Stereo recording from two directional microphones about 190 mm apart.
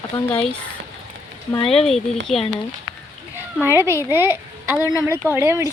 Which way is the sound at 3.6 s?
15° right (ahead or behind).